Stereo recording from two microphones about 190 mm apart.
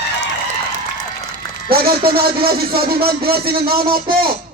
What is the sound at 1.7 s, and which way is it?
A man's voice, 55° right (ahead or behind).